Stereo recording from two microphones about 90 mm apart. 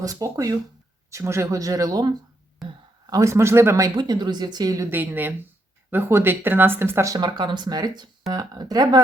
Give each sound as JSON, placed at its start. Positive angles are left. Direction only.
{"t": 0.0, "sound": "speech", "side_deg": -40}
{"t": 3.1, "sound": "speech", "side_deg": -35}
{"t": 3.9, "sound": "speech", "side_deg": -55}
{"t": 4.9, "sound": "speech", "side_deg": -20}
{"t": 7.2, "sound": "speech", "side_deg": -55}